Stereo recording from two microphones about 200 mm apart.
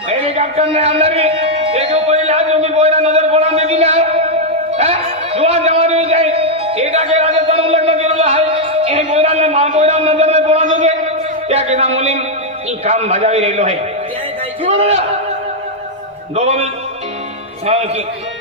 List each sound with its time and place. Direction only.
0.1 s music: 30° right (ahead or behind)
12.8 s a man's voice: 30° right (ahead or behind)
16.3 s a man's voice: 30° right (ahead or behind)
17.7 s a man's voice: 30° right (ahead or behind)